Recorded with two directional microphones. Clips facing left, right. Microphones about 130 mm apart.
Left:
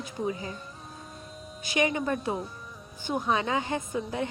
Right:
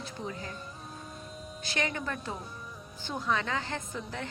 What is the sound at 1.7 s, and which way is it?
A woman's voice, 15° left (ahead or behind).